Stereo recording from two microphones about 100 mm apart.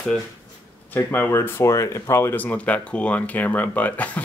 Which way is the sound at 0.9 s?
20° left (ahead or behind).